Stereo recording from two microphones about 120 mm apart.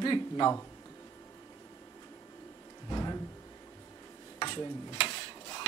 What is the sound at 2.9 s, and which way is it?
Speech, 30° left (ahead or behind).